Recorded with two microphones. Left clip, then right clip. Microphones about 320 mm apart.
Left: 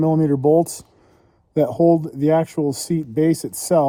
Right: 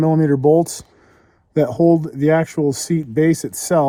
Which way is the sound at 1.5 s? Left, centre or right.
Right.